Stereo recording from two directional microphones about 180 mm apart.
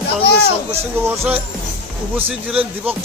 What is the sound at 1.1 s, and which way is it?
Speech, 10° right (ahead or behind).